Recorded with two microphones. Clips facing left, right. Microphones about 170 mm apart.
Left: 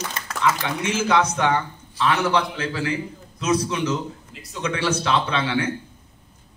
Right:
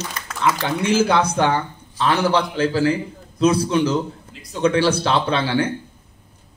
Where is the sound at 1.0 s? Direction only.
30° right (ahead or behind).